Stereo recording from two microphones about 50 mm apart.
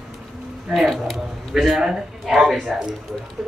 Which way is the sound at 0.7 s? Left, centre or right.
Centre.